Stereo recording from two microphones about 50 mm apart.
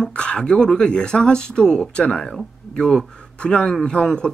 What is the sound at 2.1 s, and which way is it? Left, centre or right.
Speech, centre.